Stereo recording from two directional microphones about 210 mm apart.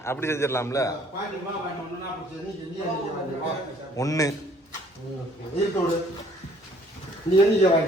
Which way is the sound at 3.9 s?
15° left (ahead or behind).